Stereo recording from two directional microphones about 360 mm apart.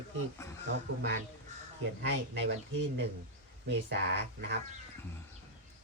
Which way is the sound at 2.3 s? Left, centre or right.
Right.